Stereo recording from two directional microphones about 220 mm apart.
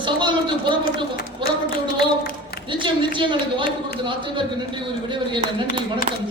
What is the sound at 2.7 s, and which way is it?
A man's voice, 20° right (ahead or behind).